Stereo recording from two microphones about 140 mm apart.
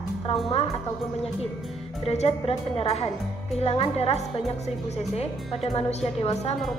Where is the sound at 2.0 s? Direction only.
45° left (ahead or behind).